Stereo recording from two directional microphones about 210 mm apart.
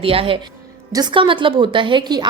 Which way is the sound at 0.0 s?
25° right (ahead or behind).